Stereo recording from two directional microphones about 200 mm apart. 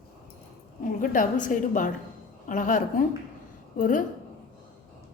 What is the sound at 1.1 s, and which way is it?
A woman's voice, 40° left (ahead or behind).